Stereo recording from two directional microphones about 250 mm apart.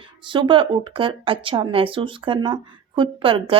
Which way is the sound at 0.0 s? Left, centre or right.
Centre.